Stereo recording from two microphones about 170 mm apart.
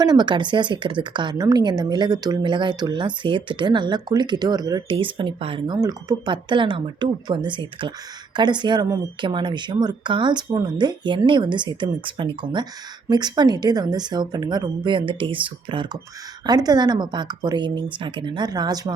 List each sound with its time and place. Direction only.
0.0 s speech: 25° right (ahead or behind)